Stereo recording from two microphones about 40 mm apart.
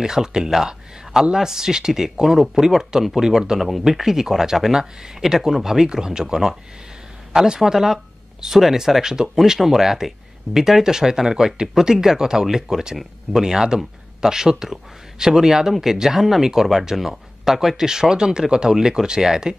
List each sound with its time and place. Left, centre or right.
0.0 s speech: centre